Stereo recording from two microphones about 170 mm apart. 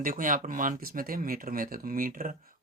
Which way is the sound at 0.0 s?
55° right (ahead or behind).